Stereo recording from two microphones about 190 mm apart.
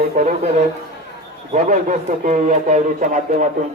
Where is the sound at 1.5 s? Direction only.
40° right (ahead or behind).